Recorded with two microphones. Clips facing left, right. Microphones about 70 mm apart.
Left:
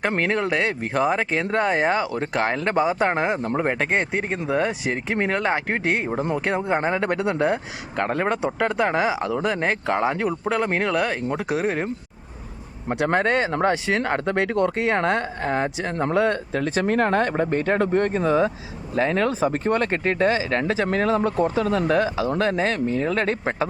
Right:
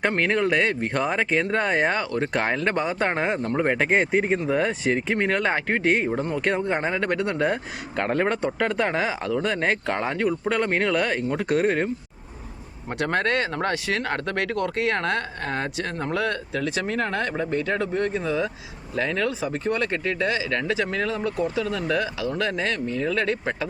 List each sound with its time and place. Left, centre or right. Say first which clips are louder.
0.2 s speech: right 1 dB; centre
7.4 s speech: left 2 dB; centre
13.0 s speech: left 3 dB; centre
16.1 s speech: left 5 dB; left
16.8 s speech: left 6 dB; left